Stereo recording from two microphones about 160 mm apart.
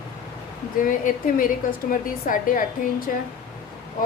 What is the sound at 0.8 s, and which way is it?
A woman's voice, 60° left (ahead or behind).